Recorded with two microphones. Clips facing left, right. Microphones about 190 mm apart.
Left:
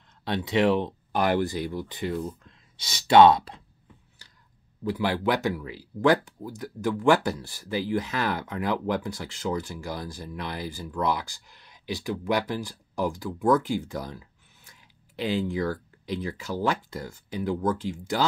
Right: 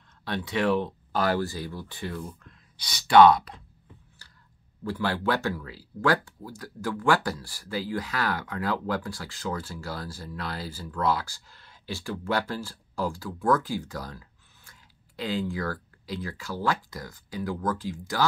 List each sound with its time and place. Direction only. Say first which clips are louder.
0.2 s speech: left 4 dB; 20° left (ahead or behind)
4.2 s a sound: even; 20° left (ahead or behind)
4.8 s speech: left 2 dB; 15° left (ahead or behind)